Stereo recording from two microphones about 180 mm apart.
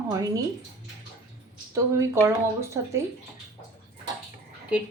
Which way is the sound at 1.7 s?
15° right (ahead or behind).